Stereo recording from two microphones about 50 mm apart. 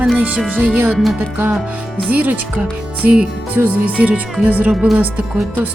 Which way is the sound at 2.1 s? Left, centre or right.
Right.